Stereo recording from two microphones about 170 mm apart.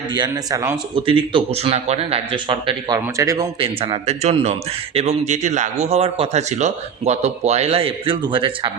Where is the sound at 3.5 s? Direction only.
35° right (ahead or behind).